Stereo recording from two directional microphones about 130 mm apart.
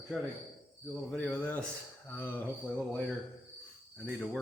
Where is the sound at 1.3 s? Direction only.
10° left (ahead or behind).